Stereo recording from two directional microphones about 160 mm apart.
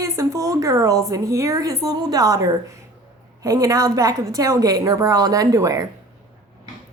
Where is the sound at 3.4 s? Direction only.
20° right (ahead or behind).